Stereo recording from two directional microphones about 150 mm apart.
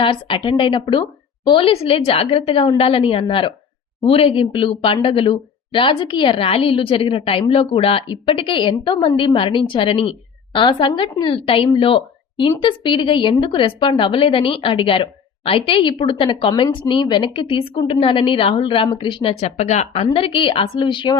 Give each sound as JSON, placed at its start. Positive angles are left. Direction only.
{"t": 0.0, "sound": "a woman's voice", "side_deg": 35}
{"t": 20.1, "sound": "a woman's voice", "side_deg": 35}